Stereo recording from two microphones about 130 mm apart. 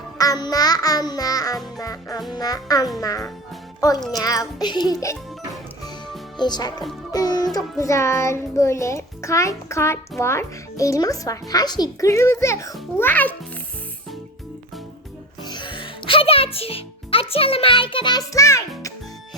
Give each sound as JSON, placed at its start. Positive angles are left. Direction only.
{"t": 0.2, "sound": "music", "side_deg": 30}
{"t": 3.8, "sound": "a child's voice", "side_deg": 25}
{"t": 4.1, "sound": "music", "side_deg": 30}
{"t": 6.3, "sound": "speech", "side_deg": 35}
{"t": 7.1, "sound": "music", "side_deg": 30}
{"t": 13.0, "sound": "a child's voice", "side_deg": 15}
{"t": 15.4, "sound": "a child's voice", "side_deg": 35}